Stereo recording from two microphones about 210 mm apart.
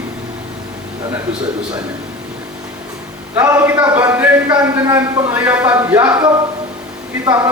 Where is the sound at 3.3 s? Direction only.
10° right (ahead or behind).